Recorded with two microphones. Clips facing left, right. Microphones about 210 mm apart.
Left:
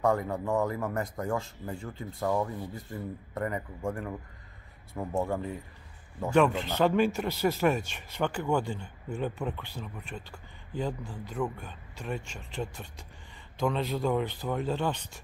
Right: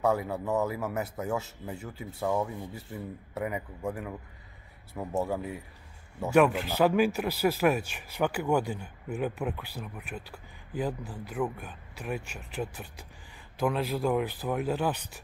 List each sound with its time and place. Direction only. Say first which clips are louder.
0.0 s speech: even; 5° right (ahead or behind)